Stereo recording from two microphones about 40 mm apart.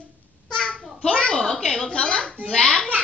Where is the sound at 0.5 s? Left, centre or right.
Centre.